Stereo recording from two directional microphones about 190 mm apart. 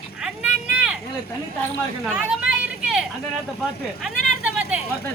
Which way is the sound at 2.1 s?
5° right (ahead or behind).